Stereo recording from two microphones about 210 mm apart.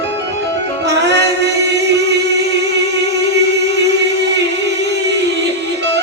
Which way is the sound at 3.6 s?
55° right (ahead or behind).